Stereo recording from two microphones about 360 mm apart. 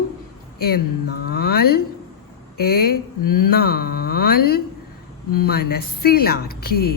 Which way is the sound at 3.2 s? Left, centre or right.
Left.